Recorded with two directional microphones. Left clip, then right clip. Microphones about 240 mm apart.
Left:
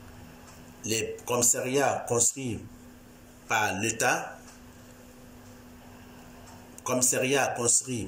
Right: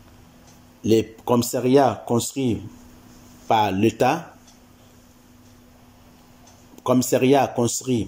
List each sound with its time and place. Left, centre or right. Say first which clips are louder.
0.8 s speech: right 11 dB; right
6.8 s speech: right 8 dB; right